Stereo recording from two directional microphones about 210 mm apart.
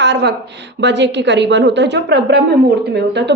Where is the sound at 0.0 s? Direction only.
55° right (ahead or behind).